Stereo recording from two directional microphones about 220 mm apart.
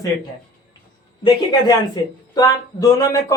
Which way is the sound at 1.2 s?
20° left (ahead or behind).